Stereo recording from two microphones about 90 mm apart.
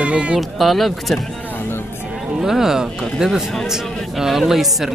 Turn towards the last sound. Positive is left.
turn(degrees=-5)  # may be behind; listen again after turning